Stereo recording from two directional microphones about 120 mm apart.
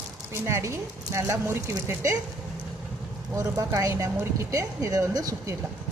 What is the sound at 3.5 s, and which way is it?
Speech, 25° right (ahead or behind).